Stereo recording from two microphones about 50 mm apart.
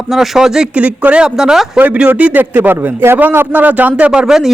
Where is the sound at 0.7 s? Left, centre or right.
Right.